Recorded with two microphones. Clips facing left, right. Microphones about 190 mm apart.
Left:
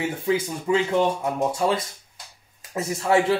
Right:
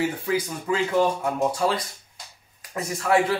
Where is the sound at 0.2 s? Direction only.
25° left (ahead or behind).